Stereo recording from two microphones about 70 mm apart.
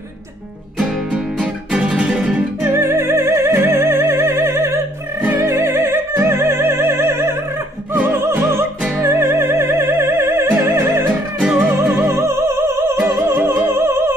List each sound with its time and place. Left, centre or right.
1.1 s music: centre
2.6 s music: right
11.3 s music: centre
11.9 s music: right